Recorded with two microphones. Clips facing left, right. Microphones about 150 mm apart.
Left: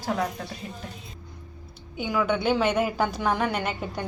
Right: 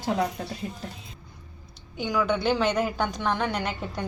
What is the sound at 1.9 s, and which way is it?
A woman's voice, 5° left (ahead or behind).